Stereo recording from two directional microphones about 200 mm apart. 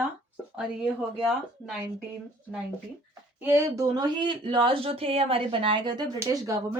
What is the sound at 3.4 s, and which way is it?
Speech, 10° right (ahead or behind).